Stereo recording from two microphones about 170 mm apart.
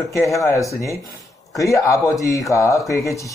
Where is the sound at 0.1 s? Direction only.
20° left (ahead or behind).